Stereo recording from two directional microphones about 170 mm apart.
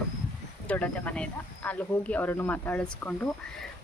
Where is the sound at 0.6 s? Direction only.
10° left (ahead or behind).